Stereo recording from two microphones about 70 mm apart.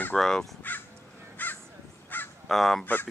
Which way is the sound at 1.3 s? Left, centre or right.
Left.